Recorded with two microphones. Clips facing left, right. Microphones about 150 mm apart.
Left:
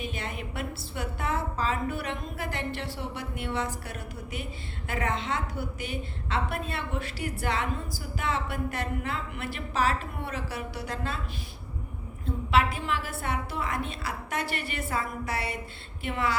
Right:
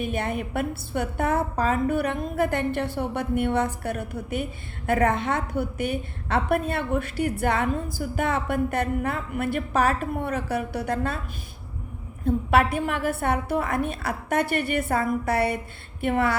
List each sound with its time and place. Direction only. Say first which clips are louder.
0.0 s a woman's voice: right 8 dB; 55° right (ahead or behind)
12.2 s a woman's voice: right 5 dB; 55° right (ahead or behind)
16.0 s a sound: right 6 dB; 55° right (ahead or behind)